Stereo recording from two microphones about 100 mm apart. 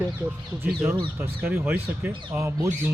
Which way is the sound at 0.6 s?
20° right (ahead or behind).